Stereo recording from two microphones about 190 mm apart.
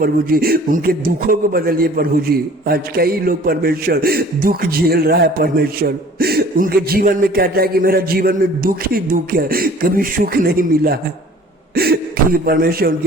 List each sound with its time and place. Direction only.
0.0 s a man's voice: 50° right (ahead or behind)